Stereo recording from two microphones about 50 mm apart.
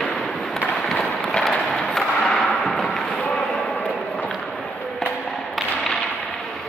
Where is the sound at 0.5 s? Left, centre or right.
Centre.